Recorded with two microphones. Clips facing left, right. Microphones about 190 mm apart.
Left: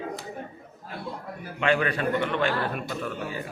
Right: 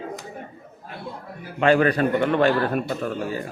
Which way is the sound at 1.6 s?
40° right (ahead or behind).